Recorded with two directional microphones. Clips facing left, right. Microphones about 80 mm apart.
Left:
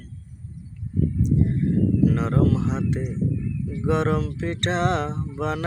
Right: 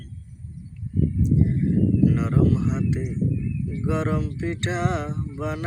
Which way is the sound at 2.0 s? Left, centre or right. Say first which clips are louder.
Even; left.